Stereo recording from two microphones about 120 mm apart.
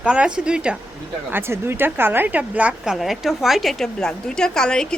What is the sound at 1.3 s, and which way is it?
A woman's voice, 20° right (ahead or behind).